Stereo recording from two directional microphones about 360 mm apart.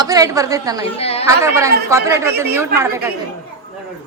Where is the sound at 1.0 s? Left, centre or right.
Centre.